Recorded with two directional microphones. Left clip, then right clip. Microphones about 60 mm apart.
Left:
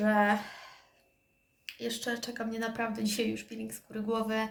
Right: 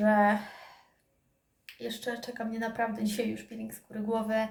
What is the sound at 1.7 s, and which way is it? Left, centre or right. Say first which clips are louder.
A woman's voice: left 1 dB; right.